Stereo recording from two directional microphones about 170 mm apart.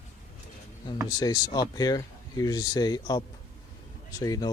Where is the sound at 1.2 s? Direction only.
25° left (ahead or behind).